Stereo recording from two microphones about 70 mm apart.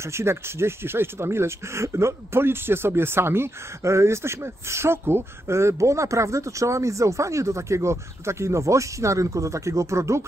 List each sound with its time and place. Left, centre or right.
0.0 s speech: right